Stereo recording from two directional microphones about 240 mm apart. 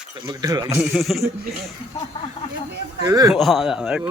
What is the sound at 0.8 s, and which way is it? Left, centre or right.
Speech, centre.